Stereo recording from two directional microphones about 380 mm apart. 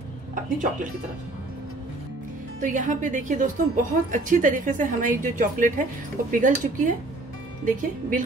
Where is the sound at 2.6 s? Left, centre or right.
Centre.